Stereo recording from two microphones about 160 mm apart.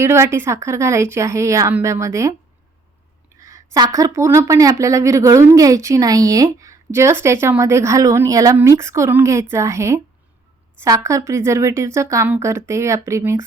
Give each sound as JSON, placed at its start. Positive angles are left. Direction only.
{"t": 0.0, "sound": "a woman's voice", "side_deg": -15}
{"t": 3.4, "sound": "a woman's voice", "side_deg": -20}